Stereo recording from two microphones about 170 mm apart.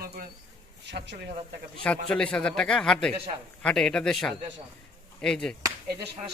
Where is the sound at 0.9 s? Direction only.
90° right.